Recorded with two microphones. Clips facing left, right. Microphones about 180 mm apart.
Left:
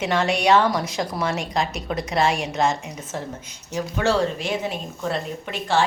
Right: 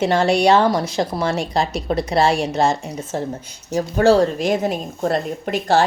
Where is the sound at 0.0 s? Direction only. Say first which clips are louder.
Right 5 dB; 30° right (ahead or behind).